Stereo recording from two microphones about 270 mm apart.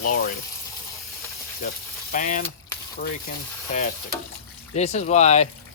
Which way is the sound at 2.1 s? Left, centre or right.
Left.